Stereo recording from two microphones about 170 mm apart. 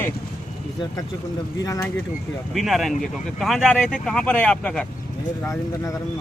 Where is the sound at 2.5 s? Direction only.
Centre (ahead or behind).